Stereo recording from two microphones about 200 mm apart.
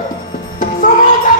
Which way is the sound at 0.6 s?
40° left (ahead or behind).